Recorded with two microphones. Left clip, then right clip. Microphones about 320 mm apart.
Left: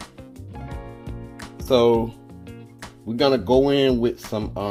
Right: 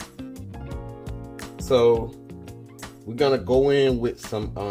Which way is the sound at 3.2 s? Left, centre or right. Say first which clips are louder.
Left 2 dB; left.